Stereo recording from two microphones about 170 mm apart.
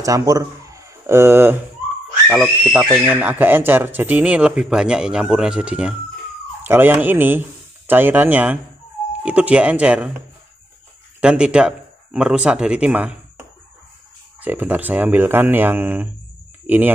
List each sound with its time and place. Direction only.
0.0 s speech: 20° right (ahead or behind)
2.2 s speech: centre (ahead or behind)
11.1 s speech: 5° right (ahead or behind)
14.4 s speech: 10° right (ahead or behind)